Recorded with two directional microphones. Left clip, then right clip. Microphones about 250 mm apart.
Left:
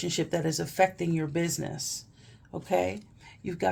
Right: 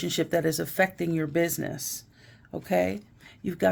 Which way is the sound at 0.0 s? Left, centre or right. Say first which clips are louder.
Right 4 dB; right.